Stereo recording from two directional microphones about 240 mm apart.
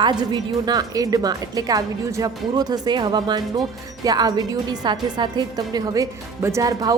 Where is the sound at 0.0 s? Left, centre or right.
Centre.